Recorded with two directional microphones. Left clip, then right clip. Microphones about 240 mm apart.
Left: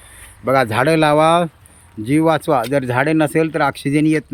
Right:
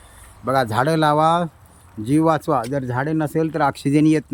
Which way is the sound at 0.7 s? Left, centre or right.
Centre.